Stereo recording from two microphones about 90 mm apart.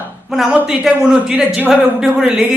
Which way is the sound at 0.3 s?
5° right (ahead or behind).